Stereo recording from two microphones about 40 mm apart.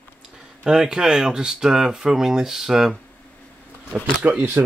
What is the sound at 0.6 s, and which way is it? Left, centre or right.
Speech, centre.